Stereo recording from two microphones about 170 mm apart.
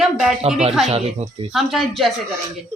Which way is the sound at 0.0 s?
Centre (ahead or behind).